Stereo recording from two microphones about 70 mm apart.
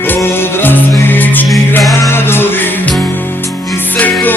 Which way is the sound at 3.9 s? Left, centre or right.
Left.